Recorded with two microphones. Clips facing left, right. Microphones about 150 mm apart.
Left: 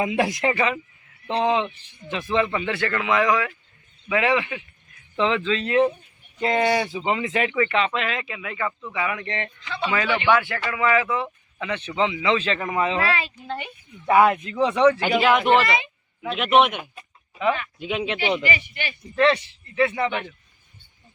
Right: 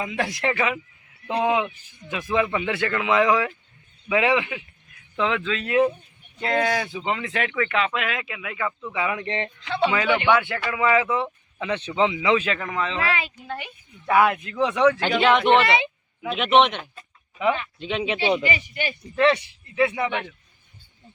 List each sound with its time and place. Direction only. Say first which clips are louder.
0.0 s speech: left 5 dB; 15° left (ahead or behind)
0.3 s speech: left 2 dB; centre (ahead or behind); by 4.4 s 15° right (ahead or behind)
5.1 s speech: left 2 dB; centre (ahead or behind); by 9.2 s 15° right (ahead or behind)
9.2 s speech: right 2 dB; 30° right (ahead or behind); by 12.5 s 10° right (ahead or behind)
12.6 s speech: left 4 dB; 15° left (ahead or behind)
14.1 s speech: left 2 dB; centre (ahead or behind)
17.4 s speech: even; 20° right (ahead or behind)
17.7 s speech: even; 5° left (ahead or behind)
18.4 s speech: right 1 dB; 35° right (ahead or behind)
19.1 s speech: even; 15° right (ahead or behind)